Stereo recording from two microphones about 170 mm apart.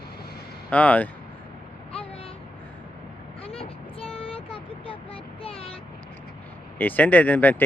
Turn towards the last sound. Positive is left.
turn(degrees=10)  # may be behind; listen again after turning